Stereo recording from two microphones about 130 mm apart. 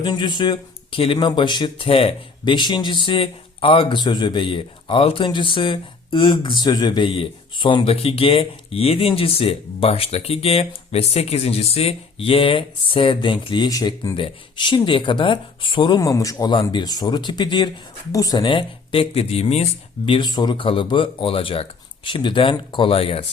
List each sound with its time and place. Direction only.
0.0 s speech: 30° left (ahead or behind)
14.2 s speech: 35° left (ahead or behind)
18.4 s speech: 40° left (ahead or behind)
20.1 s speech: 35° left (ahead or behind)